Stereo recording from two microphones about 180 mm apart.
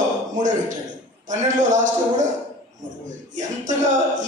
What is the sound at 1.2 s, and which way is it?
A man's voice, 45° right (ahead or behind).